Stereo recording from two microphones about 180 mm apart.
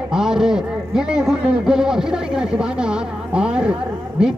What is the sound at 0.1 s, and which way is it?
A man's voice, 5° right (ahead or behind).